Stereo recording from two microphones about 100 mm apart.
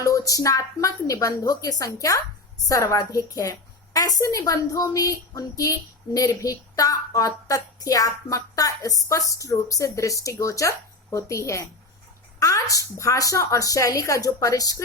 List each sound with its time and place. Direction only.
0.0 s a woman's voice: 35° left (ahead or behind)